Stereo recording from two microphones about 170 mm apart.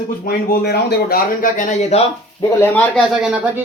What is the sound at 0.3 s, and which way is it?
Speech, 70° left (ahead or behind).